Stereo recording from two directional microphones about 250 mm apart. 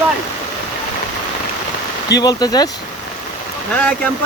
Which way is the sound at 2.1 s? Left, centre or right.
Centre.